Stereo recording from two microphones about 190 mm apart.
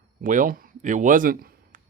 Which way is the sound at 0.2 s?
45° right (ahead or behind).